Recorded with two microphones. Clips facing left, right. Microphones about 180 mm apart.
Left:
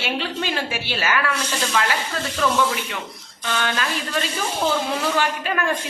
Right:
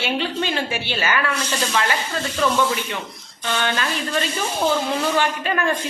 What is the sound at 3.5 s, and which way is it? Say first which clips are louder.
Speech: right 1 dB; centre (ahead or behind).